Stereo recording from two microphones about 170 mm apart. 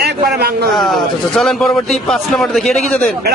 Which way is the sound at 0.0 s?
70° right (ahead or behind).